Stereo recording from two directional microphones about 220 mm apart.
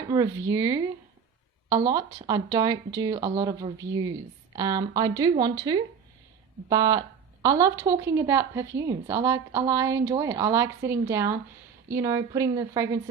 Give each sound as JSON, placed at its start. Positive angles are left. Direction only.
{"t": 0.1, "sound": "a woman's voice", "side_deg": -15}
{"t": 2.2, "sound": "a woman's voice", "side_deg": -15}